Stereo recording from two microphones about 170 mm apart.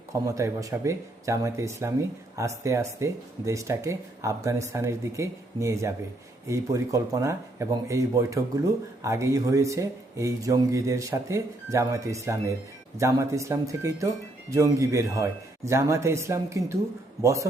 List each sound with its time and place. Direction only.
0.3 s speech: 20° right (ahead or behind)